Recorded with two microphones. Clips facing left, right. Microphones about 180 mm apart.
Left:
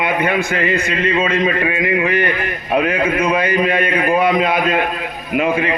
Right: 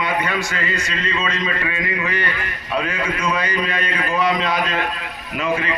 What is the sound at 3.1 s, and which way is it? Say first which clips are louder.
A man's voice: left 6 dB; 55° left (ahead or behind).